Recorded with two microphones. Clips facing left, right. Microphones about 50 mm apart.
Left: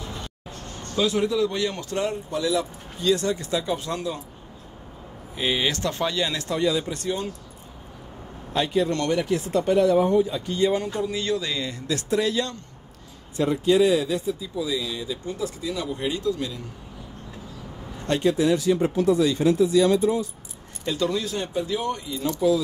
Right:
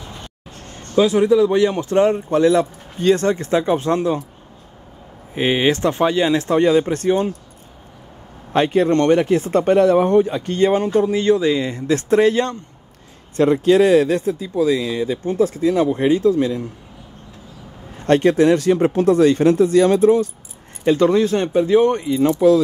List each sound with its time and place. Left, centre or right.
0.9 s speech: right
5.3 s speech: right
6.6 s speech: right
8.5 s speech: right
13.4 s speech: right
18.0 s speech: right
20.8 s speech: right